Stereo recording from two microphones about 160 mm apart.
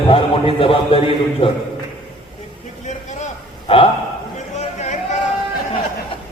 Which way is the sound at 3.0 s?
40° left (ahead or behind).